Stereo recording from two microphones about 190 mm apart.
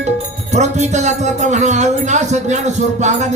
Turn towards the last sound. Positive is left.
turn(degrees=-35)  # may be behind; listen again after turning